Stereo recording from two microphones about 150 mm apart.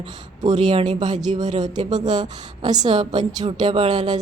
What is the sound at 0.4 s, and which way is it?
A woman's voice, 30° right (ahead or behind).